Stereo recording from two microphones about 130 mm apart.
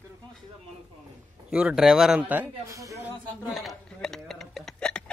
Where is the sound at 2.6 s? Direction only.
25° right (ahead or behind).